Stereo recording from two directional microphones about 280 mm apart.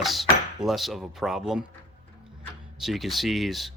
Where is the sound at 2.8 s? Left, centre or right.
Centre.